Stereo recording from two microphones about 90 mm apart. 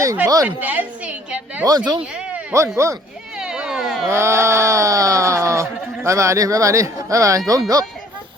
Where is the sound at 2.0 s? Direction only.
10° right (ahead or behind).